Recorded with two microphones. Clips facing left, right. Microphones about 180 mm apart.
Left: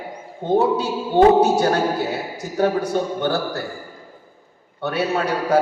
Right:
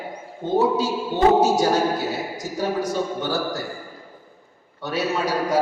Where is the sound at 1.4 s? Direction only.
60° left (ahead or behind).